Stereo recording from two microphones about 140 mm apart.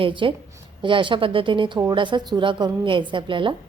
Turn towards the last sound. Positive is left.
turn(degrees=-35)  # may be behind; listen again after turning